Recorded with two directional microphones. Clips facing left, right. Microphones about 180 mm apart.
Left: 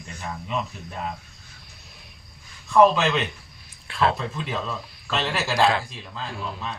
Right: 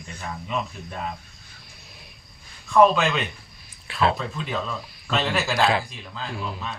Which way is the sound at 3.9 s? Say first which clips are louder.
Even; 5° right (ahead or behind).